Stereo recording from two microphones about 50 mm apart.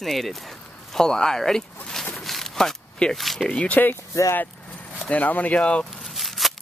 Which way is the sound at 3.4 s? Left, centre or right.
Centre.